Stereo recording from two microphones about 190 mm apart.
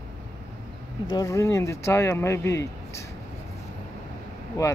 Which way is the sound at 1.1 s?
15° left (ahead or behind).